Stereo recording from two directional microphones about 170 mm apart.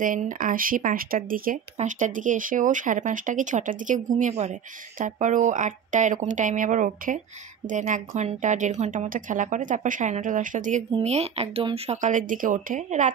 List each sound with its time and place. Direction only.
0.0 s speech: 50° right (ahead or behind)